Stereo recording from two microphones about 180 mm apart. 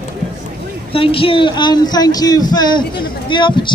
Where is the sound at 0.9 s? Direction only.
30° left (ahead or behind).